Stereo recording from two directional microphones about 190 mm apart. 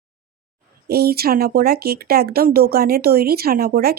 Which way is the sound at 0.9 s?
55° right (ahead or behind).